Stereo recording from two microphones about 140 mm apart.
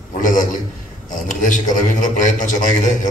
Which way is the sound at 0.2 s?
70° left (ahead or behind).